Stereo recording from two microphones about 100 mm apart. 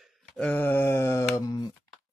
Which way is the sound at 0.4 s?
15° left (ahead or behind).